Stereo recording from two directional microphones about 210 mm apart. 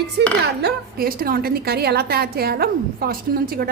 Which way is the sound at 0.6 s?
45° right (ahead or behind).